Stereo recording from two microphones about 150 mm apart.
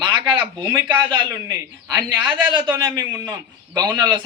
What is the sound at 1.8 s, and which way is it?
Speech, 15° right (ahead or behind).